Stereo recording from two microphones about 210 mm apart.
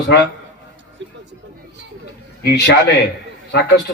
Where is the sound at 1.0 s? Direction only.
60° right (ahead or behind).